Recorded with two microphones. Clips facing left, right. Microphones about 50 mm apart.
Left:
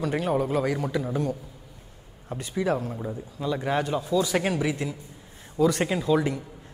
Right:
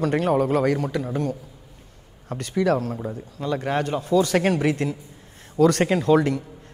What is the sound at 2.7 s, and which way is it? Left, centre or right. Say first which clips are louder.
Speech: right 4 dB; right.